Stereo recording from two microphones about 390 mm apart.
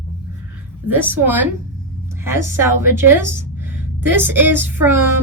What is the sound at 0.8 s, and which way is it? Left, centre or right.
A woman's voice, centre.